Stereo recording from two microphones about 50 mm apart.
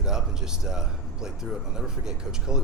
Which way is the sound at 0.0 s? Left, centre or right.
Centre.